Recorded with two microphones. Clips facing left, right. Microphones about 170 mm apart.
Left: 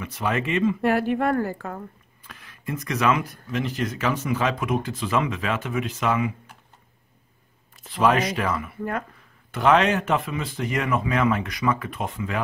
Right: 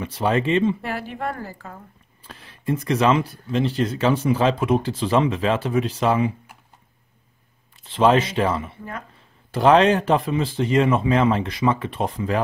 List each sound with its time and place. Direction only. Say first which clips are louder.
0.0 s speech: right 5 dB; 30° right (ahead or behind)
0.8 s a woman's voice: left 7 dB; 60° left (ahead or behind)
2.2 s speech: right 8 dB; 30° right (ahead or behind)
7.9 s speech: right 3 dB; 25° right (ahead or behind)